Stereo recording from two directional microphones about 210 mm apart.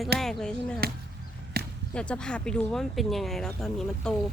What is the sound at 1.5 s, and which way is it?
Basketball bounce, 45° right (ahead or behind).